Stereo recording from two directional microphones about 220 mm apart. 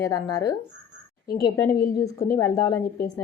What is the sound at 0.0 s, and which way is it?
A woman's voice, 15° left (ahead or behind).